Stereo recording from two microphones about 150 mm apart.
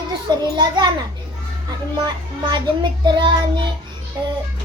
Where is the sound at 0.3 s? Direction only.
30° right (ahead or behind).